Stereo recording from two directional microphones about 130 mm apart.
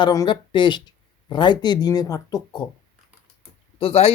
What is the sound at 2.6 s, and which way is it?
Speech, 40° left (ahead or behind).